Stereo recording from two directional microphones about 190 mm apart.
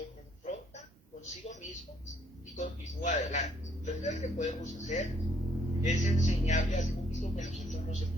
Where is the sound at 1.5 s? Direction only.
40° left (ahead or behind).